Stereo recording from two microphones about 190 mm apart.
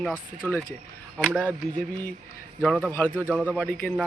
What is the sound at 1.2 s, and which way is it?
Speech, 5° left (ahead or behind).